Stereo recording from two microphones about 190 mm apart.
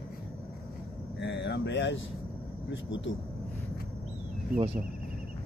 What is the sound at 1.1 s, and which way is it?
Speech, 65° left (ahead or behind).